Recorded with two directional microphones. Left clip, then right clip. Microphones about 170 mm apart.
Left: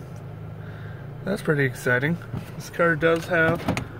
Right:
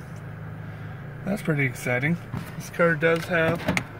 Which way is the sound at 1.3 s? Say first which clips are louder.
Left 3 dB; centre (ahead or behind).